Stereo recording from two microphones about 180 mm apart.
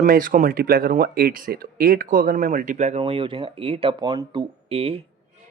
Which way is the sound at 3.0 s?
30° right (ahead or behind).